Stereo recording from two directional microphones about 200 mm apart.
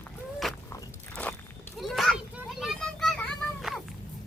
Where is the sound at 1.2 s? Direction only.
5° left (ahead or behind).